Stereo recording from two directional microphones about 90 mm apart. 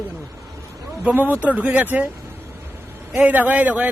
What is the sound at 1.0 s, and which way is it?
A man's voice, 20° right (ahead or behind).